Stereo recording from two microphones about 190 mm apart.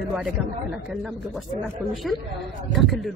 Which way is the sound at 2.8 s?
Centre (ahead or behind).